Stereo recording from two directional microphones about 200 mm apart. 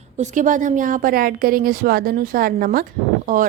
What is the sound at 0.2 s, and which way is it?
A woman's voice, 40° right (ahead or behind).